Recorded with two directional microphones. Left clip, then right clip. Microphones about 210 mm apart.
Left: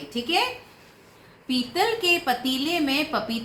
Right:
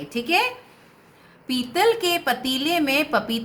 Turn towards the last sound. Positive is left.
turn(degrees=-60)  # may be behind; listen again after turning